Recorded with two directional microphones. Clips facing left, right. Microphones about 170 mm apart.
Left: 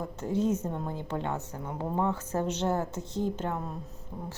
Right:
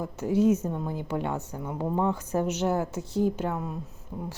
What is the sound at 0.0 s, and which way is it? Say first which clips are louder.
A woman's voice: right 5 dB; 10° right (ahead or behind).